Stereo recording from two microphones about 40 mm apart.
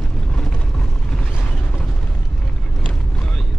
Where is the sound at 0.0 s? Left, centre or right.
Centre.